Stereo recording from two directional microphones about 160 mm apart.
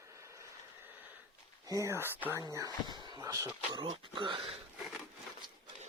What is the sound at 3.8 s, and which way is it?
Speech, 30° right (ahead or behind).